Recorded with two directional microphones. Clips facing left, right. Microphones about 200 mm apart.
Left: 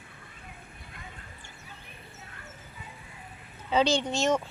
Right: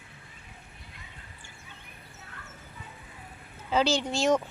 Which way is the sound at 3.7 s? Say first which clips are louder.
Left 1 dB; 5° right (ahead or behind).